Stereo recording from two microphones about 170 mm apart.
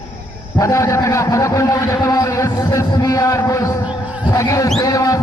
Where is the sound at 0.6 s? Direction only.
20° left (ahead or behind).